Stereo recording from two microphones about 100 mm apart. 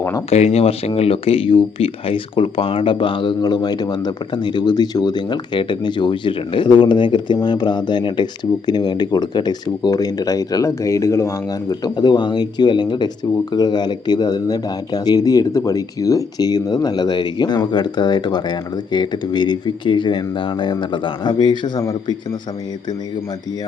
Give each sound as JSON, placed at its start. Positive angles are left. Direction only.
{"t": 0.3, "sound": "speech", "side_deg": 90}
{"t": 11.7, "sound": "speech", "side_deg": 45}